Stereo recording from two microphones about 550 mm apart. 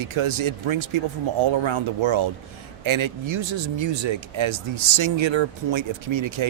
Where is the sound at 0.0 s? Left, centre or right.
Right.